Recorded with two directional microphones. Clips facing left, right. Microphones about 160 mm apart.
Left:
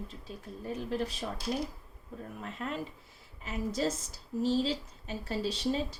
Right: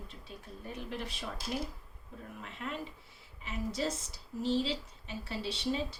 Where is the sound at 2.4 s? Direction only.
40° left (ahead or behind).